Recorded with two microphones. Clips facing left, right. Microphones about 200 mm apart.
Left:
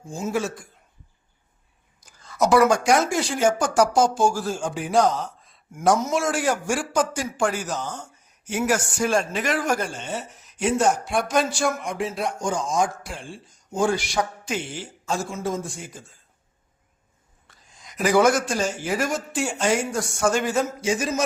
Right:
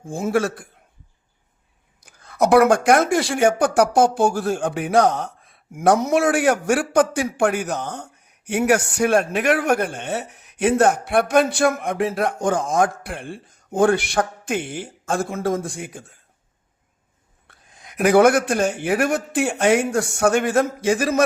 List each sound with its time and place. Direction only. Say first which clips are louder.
0.0 s speech: right 5 dB; 55° right (ahead or behind)
2.0 s speech: right 3 dB; 60° right (ahead or behind)
17.5 s speech: right 2 dB; 60° right (ahead or behind)